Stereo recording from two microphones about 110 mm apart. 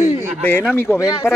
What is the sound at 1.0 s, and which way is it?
Speech, 30° left (ahead or behind).